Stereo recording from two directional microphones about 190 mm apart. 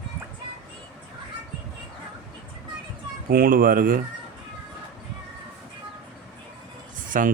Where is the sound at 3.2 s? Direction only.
50° right (ahead or behind).